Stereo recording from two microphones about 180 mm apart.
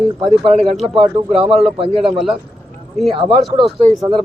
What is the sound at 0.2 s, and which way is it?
Speech, 35° right (ahead or behind).